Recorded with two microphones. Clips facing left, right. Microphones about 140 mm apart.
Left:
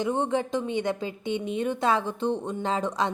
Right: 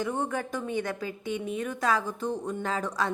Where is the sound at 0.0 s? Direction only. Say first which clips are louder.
Left 4 dB; 20° left (ahead or behind).